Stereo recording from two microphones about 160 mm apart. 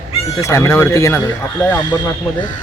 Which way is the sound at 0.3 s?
20° left (ahead or behind).